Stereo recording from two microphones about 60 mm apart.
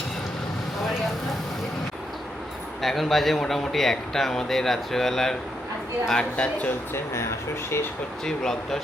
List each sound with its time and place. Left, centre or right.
2.8 s speech: centre
6.1 s speech: centre
6.9 s speech: left
8.2 s speech: centre